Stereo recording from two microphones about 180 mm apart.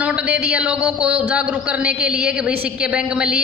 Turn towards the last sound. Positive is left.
turn(degrees=-5)  # may be behind; listen again after turning